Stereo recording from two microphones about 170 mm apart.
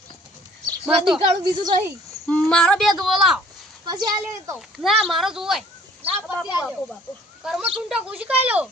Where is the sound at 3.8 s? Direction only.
25° right (ahead or behind).